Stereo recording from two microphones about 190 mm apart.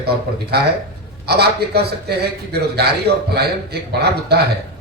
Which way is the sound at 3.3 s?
60° right (ahead or behind).